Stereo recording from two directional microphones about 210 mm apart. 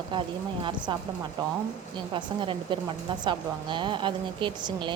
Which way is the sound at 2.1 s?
25° right (ahead or behind).